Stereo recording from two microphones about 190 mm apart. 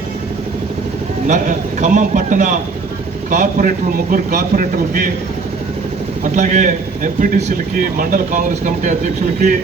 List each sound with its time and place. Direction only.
1.3 s speech: 40° right (ahead or behind)
6.3 s speech: 40° right (ahead or behind)